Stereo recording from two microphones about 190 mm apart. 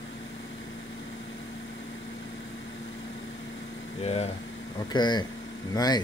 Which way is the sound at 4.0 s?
35° left (ahead or behind).